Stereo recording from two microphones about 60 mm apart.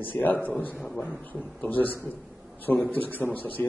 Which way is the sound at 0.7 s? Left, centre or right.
Centre.